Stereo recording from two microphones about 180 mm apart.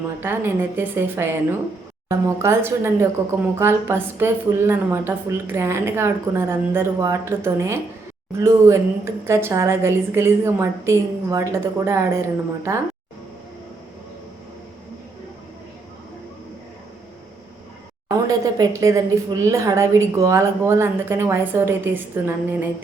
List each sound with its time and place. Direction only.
0.2 s a woman's voice: 10° right (ahead or behind)
18.3 s a woman's voice: 20° right (ahead or behind)